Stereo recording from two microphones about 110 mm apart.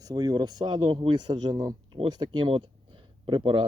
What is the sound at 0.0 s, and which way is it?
Speech, 35° right (ahead or behind).